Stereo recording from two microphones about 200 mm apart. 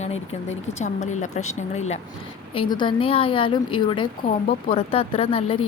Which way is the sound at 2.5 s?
25° left (ahead or behind).